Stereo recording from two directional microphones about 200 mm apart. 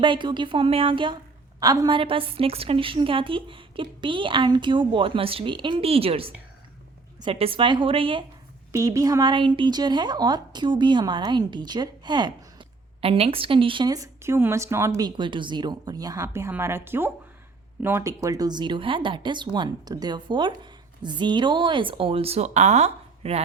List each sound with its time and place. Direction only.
0.0 s a woman's voice: 25° right (ahead or behind)